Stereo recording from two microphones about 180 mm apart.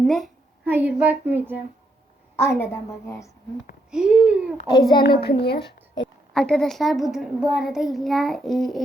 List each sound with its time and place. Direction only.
0.0 s a woman's voice: centre (ahead or behind)
0.6 s a child's voice: 10° right (ahead or behind)
2.3 s a woman's voice: 15° left (ahead or behind)
3.9 s a child's voice: 5° right (ahead or behind)
5.0 s a woman's voice: 60° left (ahead or behind)
6.3 s a child's voice: 5° left (ahead or behind)